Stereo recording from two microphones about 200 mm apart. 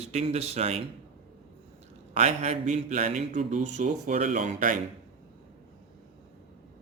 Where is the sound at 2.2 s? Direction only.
35° right (ahead or behind).